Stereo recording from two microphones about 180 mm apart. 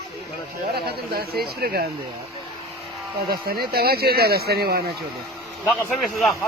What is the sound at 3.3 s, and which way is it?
Speech, 55° right (ahead or behind).